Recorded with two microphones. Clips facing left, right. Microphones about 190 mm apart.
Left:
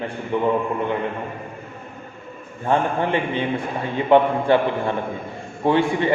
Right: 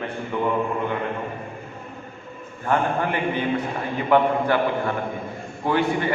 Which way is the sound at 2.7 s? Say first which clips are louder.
Left 2 dB; 25° left (ahead or behind).